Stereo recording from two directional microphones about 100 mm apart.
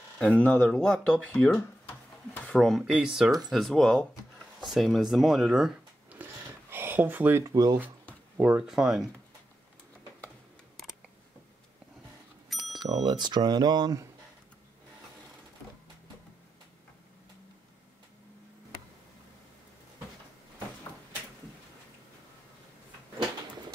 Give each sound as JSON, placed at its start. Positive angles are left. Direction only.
{"t": 0.2, "sound": "speech", "side_deg": 15}
{"t": 0.7, "sound": "speech", "side_deg": 5}
{"t": 2.5, "sound": "speech", "side_deg": 5}
{"t": 2.8, "sound": "speech", "side_deg": -5}
{"t": 6.0, "sound": "a sound", "side_deg": -20}
{"t": 8.4, "sound": "speech", "side_deg": -20}
{"t": 8.6, "sound": "speech", "side_deg": -5}
{"t": 12.7, "sound": "speech", "side_deg": -45}